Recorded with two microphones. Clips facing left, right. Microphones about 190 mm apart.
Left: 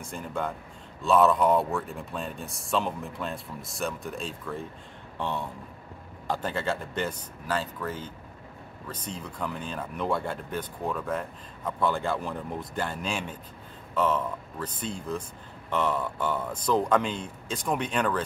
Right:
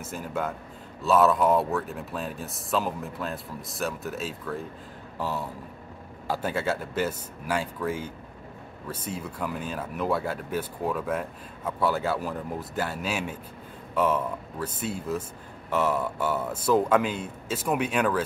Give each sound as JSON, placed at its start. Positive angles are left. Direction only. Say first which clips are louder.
{"t": 0.0, "sound": "a man's voice", "louder": "right 1 dB", "side_deg": -5}